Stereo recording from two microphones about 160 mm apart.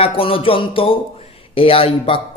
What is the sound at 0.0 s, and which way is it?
Speech, 35° left (ahead or behind).